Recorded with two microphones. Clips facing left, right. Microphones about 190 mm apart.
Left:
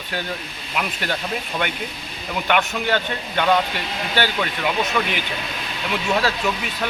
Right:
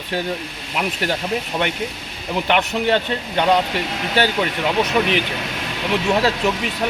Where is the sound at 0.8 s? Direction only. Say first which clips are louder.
Right 3 dB; 30° right (ahead or behind).